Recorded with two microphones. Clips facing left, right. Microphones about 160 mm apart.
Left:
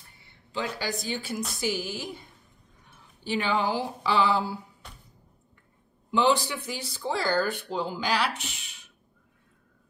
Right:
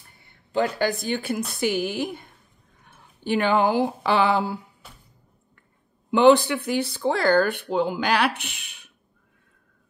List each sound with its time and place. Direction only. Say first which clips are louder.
0.2 s speech: right 9 dB; 50° right (ahead or behind)
4.8 s a sound: even; 5° right (ahead or behind)
6.0 s speech: right 8 dB; 60° right (ahead or behind)